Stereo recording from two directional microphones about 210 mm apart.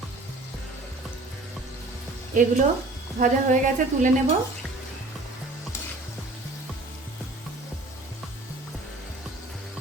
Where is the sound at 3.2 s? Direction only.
40° right (ahead or behind).